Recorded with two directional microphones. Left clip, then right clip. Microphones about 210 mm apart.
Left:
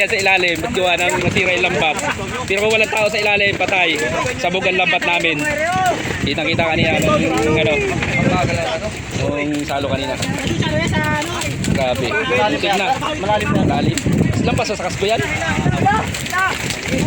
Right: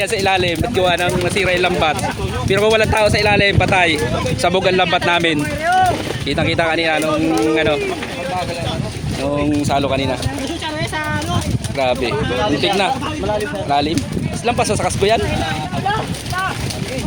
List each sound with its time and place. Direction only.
0.0 s speech: 10° right (ahead or behind)
1.5 s speech: 60° right (ahead or behind)
2.5 s speech: 20° right (ahead or behind)
4.4 s speech: 30° right (ahead or behind)
6.4 s speech: 15° right (ahead or behind)
7.5 s speech: 65° right (ahead or behind)
14.4 s speech: 20° right (ahead or behind)